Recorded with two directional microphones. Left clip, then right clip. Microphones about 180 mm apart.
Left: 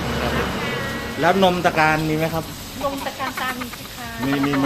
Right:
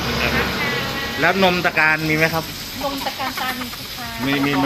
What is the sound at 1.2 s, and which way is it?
Speech, centre (ahead or behind).